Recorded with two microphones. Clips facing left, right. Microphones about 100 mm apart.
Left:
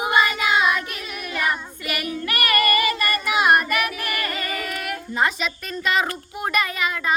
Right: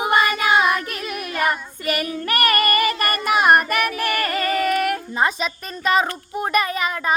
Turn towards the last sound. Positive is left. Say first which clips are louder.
# right 2 dB
turn(degrees=-35)  # may be behind; listen again after turning